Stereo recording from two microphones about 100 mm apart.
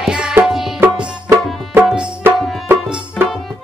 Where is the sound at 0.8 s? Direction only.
20° right (ahead or behind).